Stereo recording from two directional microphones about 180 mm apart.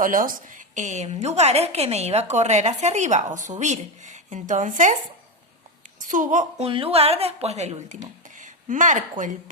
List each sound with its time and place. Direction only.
0.0 s a woman's voice: 50° right (ahead or behind)
6.0 s a woman's voice: 45° right (ahead or behind)